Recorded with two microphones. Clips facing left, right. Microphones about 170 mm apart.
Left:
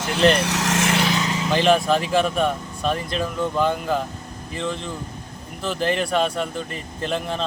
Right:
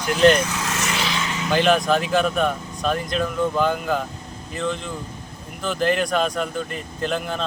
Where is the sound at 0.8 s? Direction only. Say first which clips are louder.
Left 6 dB; 50° left (ahead or behind).